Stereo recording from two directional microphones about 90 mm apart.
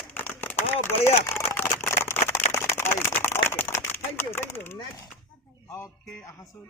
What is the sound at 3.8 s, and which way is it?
Speech, 25° left (ahead or behind).